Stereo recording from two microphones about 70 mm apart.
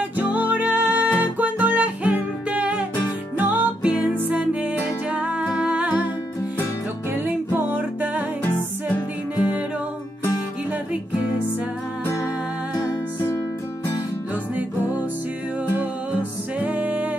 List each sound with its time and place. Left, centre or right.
0.2 s music: centre
7.2 s music: right
16.5 s music: centre